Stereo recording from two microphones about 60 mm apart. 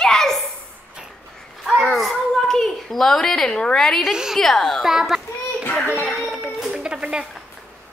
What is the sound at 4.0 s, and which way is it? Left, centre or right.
Speech, centre.